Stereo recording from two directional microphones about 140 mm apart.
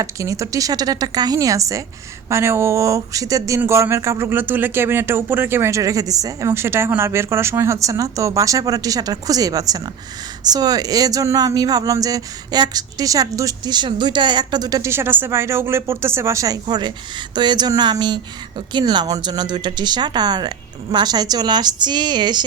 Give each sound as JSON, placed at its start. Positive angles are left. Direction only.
{"t": 0.0, "sound": "a woman's voice", "side_deg": -20}